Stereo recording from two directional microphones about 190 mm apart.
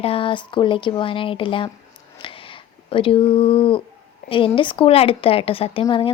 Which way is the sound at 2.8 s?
30° left (ahead or behind).